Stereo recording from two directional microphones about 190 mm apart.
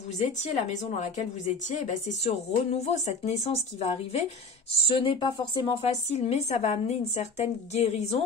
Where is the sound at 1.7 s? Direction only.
40° left (ahead or behind).